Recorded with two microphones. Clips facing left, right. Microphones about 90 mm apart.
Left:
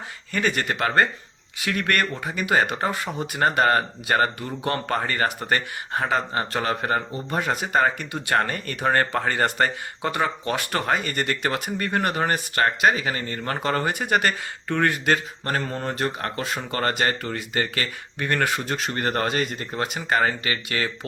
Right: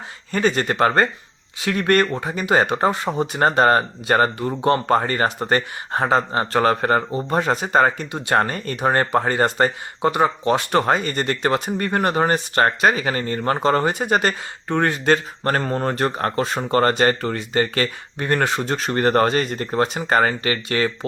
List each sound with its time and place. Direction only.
0.3 s speech: 25° right (ahead or behind); by 7.0 s 45° right (ahead or behind)
7.3 s speech: 35° right (ahead or behind)
15.4 s speech: 45° right (ahead or behind)